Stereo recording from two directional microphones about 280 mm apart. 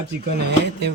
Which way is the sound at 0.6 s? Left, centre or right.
Right.